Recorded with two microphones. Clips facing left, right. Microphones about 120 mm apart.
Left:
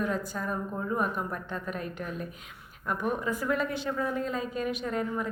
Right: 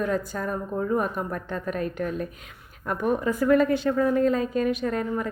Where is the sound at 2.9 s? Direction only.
75° right (ahead or behind).